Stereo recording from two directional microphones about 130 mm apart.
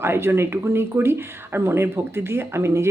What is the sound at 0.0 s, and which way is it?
Speech, 20° right (ahead or behind).